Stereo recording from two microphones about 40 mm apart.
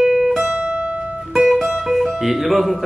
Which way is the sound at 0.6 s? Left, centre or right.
Right.